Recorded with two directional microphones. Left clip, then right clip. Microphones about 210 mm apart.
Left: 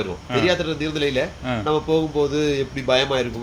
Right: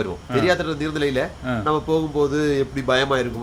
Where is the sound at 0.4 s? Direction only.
15° right (ahead or behind).